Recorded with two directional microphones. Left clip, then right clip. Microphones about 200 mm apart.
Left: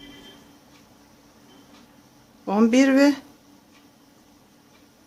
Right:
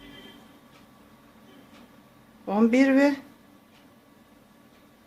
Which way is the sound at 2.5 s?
20° left (ahead or behind).